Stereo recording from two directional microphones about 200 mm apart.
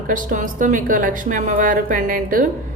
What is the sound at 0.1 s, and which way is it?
A woman's voice, 40° right (ahead or behind).